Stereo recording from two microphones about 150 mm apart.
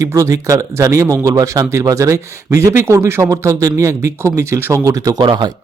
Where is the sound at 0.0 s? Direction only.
20° right (ahead or behind).